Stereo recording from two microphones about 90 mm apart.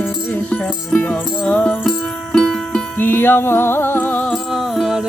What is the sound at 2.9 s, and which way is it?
Music, 20° left (ahead or behind).